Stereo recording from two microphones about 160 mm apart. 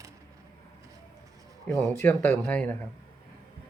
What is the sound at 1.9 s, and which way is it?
Speech, 10° left (ahead or behind).